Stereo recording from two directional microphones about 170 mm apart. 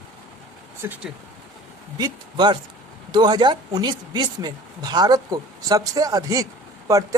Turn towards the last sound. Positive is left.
turn(degrees=-20)  # may be behind; listen again after turning